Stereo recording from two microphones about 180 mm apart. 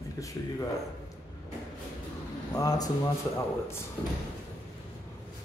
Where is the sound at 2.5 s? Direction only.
20° left (ahead or behind).